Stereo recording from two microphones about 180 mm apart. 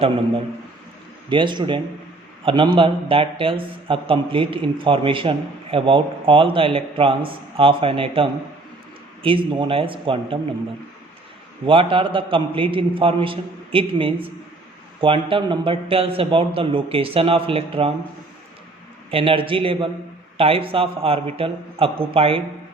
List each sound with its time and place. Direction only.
1.3 s a man's voice: 25° right (ahead or behind)
11.6 s a man's voice: 30° right (ahead or behind)
19.1 s a man's voice: 30° right (ahead or behind)